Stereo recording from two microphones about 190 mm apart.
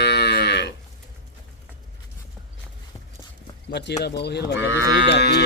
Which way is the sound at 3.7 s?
65° left (ahead or behind).